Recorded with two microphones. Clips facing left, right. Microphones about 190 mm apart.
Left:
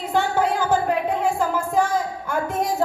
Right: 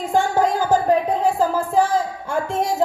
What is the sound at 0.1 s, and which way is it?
Music, 45° right (ahead or behind).